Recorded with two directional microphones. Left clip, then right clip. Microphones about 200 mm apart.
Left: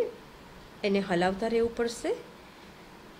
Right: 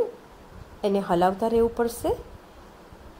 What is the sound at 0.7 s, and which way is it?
A woman's voice, 20° right (ahead or behind).